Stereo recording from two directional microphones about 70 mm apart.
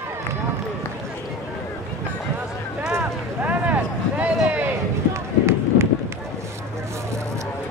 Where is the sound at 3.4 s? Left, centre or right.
Right.